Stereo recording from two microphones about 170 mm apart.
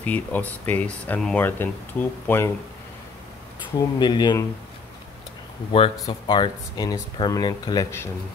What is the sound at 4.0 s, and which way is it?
Speech, 25° left (ahead or behind).